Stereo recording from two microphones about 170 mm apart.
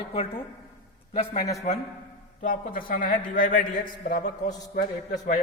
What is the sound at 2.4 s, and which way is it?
A man's voice, 55° left (ahead or behind).